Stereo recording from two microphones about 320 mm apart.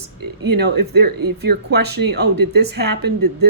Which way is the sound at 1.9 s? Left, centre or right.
Right.